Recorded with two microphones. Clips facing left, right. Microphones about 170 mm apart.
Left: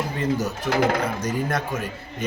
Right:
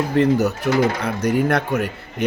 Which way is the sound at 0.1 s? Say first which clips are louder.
Right 8 dB; 65° right (ahead or behind).